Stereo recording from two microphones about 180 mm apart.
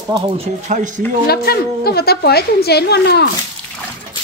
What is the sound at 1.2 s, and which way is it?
A woman's voice, 60° left (ahead or behind).